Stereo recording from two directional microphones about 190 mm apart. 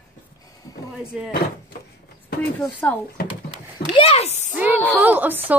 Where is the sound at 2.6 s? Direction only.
10° left (ahead or behind).